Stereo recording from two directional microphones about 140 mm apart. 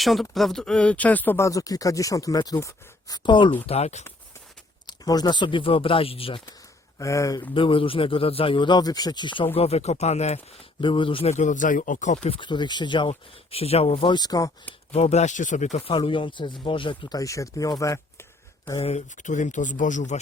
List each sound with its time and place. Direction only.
0.0 s speech: centre (ahead or behind); by 3.2 s 25° left (ahead or behind)
3.2 s speech: 35° left (ahead or behind)
3.7 s speech: 50° left (ahead or behind)
4.9 s speech: 30° left (ahead or behind)
7.0 s speech: 20° left (ahead or behind)
7.5 s speech: 40° left (ahead or behind)
9.6 s speech: 50° left (ahead or behind)
12.3 s speech: 35° left (ahead or behind)
14.9 s speech: 50° left (ahead or behind)
15.9 s speech: 35° left (ahead or behind); by 18.8 s 20° left (ahead or behind)
18.8 s speech: 50° left (ahead or behind)